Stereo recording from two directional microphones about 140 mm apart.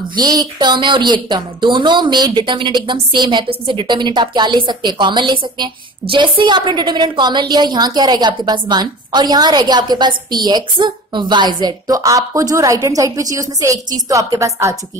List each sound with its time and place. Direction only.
0.2 s a woman's voice: 30° right (ahead or behind)